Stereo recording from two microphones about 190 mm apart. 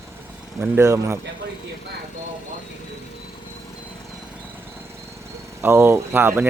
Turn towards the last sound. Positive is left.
turn(degrees=-10)  # may be behind; listen again after turning